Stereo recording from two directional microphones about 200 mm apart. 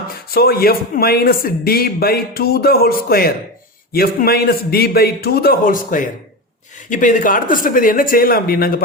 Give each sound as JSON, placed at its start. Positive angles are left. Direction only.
{"t": 0.3, "sound": "speech", "side_deg": 50}